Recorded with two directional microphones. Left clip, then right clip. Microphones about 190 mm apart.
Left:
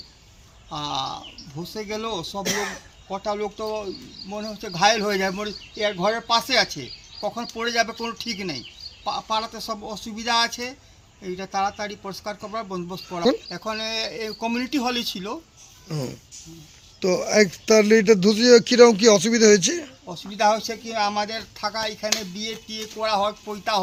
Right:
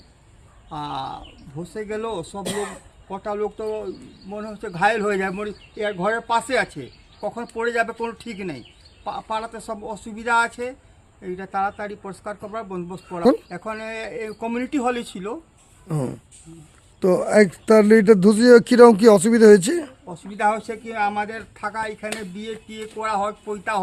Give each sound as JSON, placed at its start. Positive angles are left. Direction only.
{"t": 0.7, "sound": "speech", "side_deg": 0}
{"t": 17.0, "sound": "speech", "side_deg": -35}
{"t": 20.1, "sound": "speech", "side_deg": 0}